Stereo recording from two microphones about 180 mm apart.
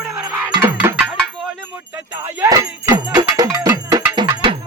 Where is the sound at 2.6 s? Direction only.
15° right (ahead or behind).